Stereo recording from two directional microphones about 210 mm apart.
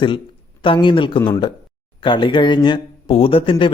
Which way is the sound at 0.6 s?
25° left (ahead or behind).